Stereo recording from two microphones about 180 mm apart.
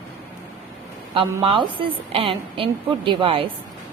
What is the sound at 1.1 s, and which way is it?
A woman's voice, 30° right (ahead or behind).